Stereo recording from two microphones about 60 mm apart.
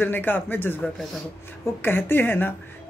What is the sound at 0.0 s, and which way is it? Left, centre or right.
Speech, left.